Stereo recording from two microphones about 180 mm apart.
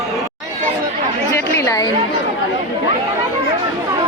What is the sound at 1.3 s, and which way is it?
Chatter, 15° left (ahead or behind).